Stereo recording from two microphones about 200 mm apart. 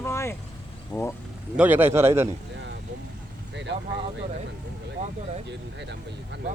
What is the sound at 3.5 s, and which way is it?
Speech, 60° right (ahead or behind).